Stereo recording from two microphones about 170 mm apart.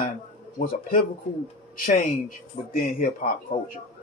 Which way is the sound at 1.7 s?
55° left (ahead or behind).